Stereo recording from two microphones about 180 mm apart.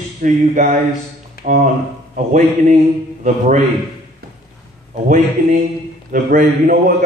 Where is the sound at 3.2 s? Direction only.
45° right (ahead or behind).